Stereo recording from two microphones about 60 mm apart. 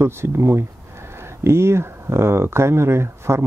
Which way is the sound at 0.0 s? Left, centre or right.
Right.